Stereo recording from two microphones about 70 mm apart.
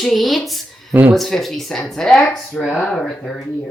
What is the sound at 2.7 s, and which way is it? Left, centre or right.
Speech, left.